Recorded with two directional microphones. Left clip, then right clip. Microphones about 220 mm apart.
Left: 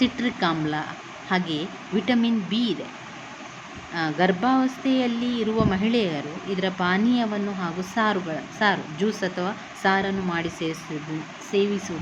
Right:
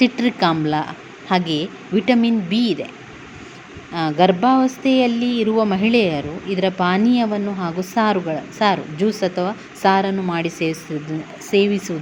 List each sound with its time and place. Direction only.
0.0 s a woman's voice: 20° right (ahead or behind)
3.9 s a woman's voice: 15° right (ahead or behind)